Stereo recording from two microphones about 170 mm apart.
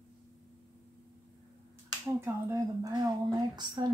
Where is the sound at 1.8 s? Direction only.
15° right (ahead or behind).